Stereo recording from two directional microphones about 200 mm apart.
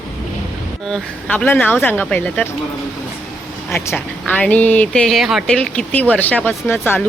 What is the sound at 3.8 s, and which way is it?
Speech, 10° left (ahead or behind).